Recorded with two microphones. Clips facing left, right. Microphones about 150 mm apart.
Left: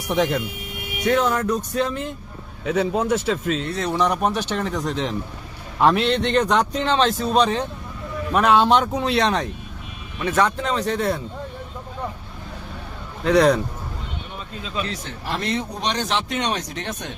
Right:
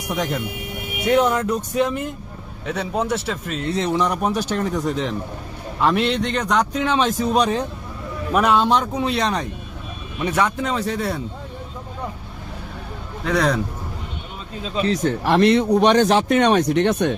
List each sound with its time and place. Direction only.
1.1 s speech: 15° right (ahead or behind)
2.6 s speech: 5° left (ahead or behind)
3.7 s speech: 25° right (ahead or behind)
4.1 s speech: 5° right (ahead or behind)
10.2 s speech: 10° right (ahead or behind)
13.2 s speech: centre (ahead or behind)
14.6 s speech: 35° right (ahead or behind)
15.0 s speech: 70° right (ahead or behind)